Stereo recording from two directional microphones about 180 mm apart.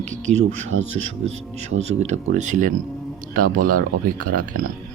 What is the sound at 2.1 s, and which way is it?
Speech, 40° right (ahead or behind).